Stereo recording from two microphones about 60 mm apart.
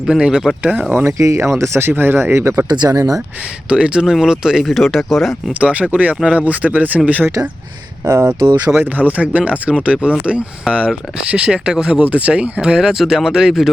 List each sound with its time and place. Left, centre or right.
0.1 s speech: centre
0.6 s speech: right
1.2 s speech: right
1.9 s speech: right
3.7 s speech: centre
5.5 s speech: right
8.0 s speech: right
9.0 s speech: right; by 13.7 s centre